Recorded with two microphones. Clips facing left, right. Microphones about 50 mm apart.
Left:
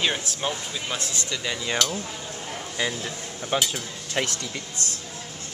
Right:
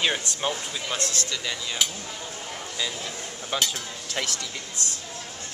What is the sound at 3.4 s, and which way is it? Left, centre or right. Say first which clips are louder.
Speech: left 3 dB; centre.